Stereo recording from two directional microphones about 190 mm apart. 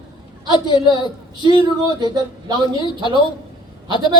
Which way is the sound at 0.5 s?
25° left (ahead or behind).